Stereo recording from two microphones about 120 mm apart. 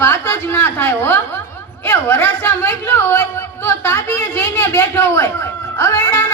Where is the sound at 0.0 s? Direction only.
20° left (ahead or behind).